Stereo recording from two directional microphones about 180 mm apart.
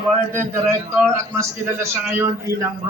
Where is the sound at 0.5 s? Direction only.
15° right (ahead or behind).